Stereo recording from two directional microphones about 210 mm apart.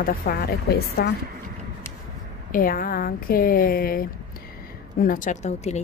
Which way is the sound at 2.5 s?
40° left (ahead or behind).